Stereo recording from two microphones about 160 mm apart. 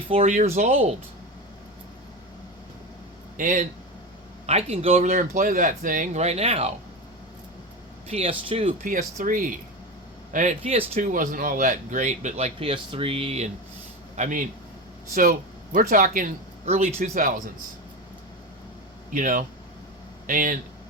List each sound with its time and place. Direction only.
0.3 s speech: 50° right (ahead or behind)
3.3 s speech: 55° right (ahead or behind)
4.4 s speech: 40° right (ahead or behind)
8.1 s speech: 35° right (ahead or behind)
8.8 s speech: 60° right (ahead or behind)
10.6 s speech: 40° right (ahead or behind)
11.0 s speech: 55° right (ahead or behind); by 13.5 s 40° right (ahead or behind)
14.2 s speech: 55° right (ahead or behind)
16.6 s speech: 40° right (ahead or behind)
17.0 s speech: 60° right (ahead or behind)
19.1 s speech: 55° right (ahead or behind)